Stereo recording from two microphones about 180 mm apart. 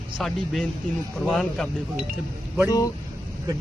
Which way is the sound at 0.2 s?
Centre (ahead or behind).